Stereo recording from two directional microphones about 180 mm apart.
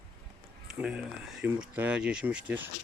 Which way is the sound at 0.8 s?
5° right (ahead or behind).